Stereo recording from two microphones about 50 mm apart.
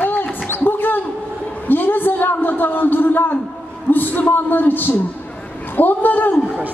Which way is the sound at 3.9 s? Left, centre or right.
Left.